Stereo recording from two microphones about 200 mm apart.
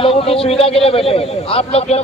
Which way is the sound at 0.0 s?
30° left (ahead or behind).